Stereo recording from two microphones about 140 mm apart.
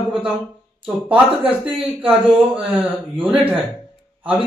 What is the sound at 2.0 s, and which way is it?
A man's voice, 10° right (ahead or behind).